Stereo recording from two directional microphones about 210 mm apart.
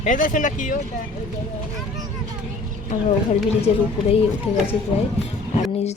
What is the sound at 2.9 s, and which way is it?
A woman's voice, 35° left (ahead or behind).